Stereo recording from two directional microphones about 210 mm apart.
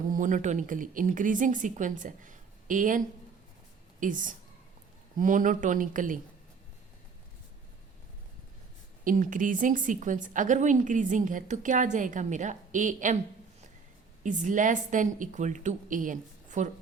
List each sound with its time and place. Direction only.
0.1 s a woman's voice: 35° right (ahead or behind)
4.0 s a woman's voice: 40° right (ahead or behind)
9.0 s a woman's voice: 40° right (ahead or behind)
14.3 s a woman's voice: 35° right (ahead or behind)